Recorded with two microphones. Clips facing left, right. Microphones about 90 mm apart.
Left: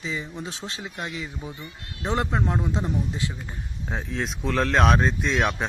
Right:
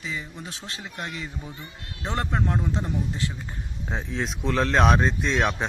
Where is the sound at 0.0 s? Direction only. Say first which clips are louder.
Left 3 dB; 20° left (ahead or behind).